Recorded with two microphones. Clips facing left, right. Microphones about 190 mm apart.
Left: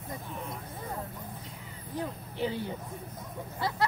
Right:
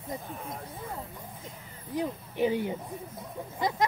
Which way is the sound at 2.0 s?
15° right (ahead or behind).